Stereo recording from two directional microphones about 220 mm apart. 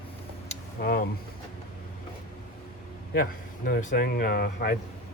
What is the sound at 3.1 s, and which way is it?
Speech, 40° left (ahead or behind).